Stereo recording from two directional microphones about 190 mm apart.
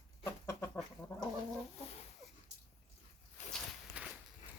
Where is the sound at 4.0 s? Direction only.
5° right (ahead or behind).